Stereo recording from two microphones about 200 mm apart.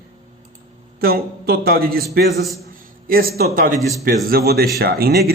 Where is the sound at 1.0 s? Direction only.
50° right (ahead or behind).